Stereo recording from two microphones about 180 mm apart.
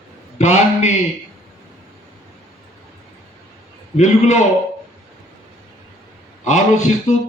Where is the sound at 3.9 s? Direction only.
40° left (ahead or behind).